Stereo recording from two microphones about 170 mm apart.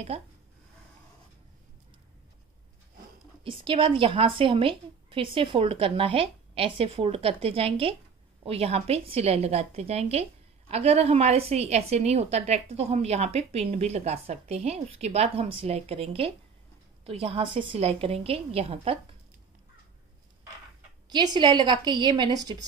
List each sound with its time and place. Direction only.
0.1 s a woman's voice: 35° right (ahead or behind)
3.4 s a woman's voice: 30° right (ahead or behind)
21.1 s a woman's voice: 25° right (ahead or behind)